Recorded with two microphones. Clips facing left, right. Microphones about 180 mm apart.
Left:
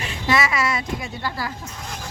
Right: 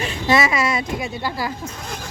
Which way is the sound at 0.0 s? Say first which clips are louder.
Right 3 dB; 25° right (ahead or behind).